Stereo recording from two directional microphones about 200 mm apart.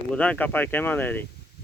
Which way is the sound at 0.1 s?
5° left (ahead or behind).